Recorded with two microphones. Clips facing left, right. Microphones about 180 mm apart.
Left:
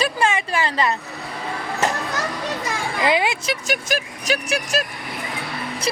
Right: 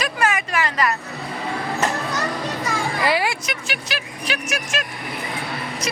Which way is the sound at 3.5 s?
40° left (ahead or behind).